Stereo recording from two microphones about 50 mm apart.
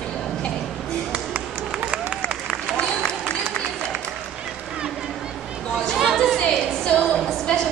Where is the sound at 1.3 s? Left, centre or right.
Right.